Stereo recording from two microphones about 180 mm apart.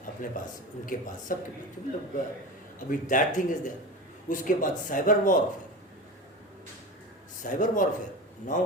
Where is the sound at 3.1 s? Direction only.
45° left (ahead or behind).